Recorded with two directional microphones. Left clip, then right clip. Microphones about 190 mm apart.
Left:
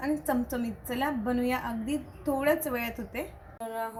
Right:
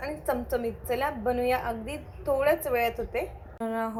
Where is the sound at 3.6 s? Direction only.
20° right (ahead or behind).